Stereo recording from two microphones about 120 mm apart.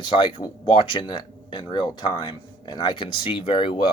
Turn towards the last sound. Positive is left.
turn(degrees=45)  # may be behind; listen again after turning